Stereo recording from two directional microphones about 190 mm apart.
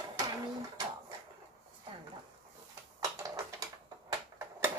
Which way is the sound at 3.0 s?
20° right (ahead or behind).